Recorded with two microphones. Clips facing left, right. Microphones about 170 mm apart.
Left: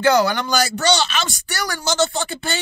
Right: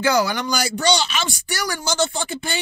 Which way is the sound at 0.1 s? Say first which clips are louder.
Left 3 dB; 10° right (ahead or behind).